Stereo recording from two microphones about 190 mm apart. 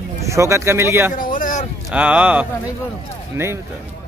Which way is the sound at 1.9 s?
5° right (ahead or behind).